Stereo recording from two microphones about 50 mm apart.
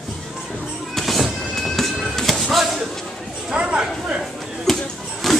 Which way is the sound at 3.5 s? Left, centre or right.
Right.